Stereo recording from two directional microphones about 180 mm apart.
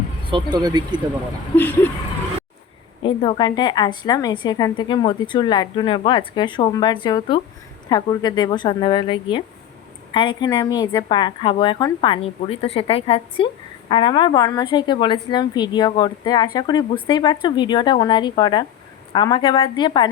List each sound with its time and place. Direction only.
0.3 s speech: 25° right (ahead or behind)
1.5 s speech: 10° left (ahead or behind)
3.0 s a woman's voice: 30° left (ahead or behind)